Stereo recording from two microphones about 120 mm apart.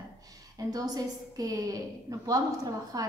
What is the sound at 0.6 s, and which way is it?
A woman's voice, 30° right (ahead or behind).